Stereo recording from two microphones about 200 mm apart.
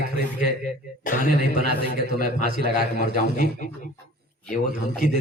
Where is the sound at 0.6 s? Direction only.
45° left (ahead or behind).